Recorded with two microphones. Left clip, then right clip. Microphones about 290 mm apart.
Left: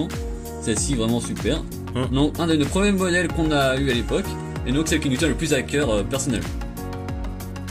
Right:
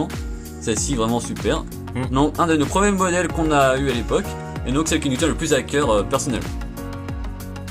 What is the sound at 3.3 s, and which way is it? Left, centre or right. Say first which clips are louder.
Speech: right 4 dB; centre.